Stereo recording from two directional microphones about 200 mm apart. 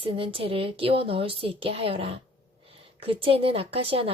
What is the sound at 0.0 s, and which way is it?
A woman's voice, 25° right (ahead or behind).